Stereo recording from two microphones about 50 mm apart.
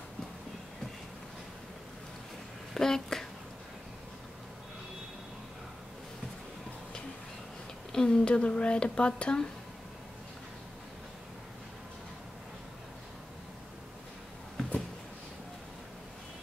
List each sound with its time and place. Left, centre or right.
2.7 s speech: centre
7.9 s speech: centre